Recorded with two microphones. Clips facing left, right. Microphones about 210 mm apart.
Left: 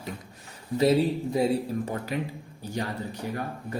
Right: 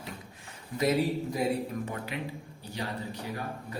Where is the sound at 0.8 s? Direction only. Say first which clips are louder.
Left 5 dB; 30° left (ahead or behind).